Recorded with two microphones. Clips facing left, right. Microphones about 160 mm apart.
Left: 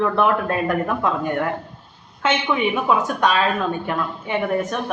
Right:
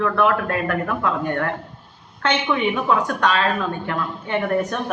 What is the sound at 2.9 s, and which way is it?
A woman's voice, 15° left (ahead or behind).